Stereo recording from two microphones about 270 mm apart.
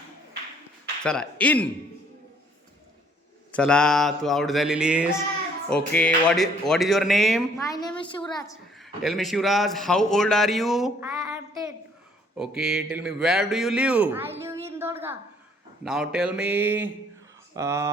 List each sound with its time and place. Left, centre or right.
1.0 s a man's voice: centre
3.5 s a man's voice: centre
7.6 s a woman's voice: centre
8.8 s a man's voice: centre
12.4 s a man's voice: centre